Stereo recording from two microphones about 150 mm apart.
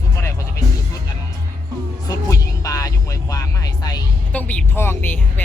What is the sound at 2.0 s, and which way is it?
Music, 25° left (ahead or behind).